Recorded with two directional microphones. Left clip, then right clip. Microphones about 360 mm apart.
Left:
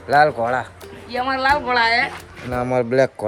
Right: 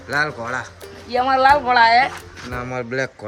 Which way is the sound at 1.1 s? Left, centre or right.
Right.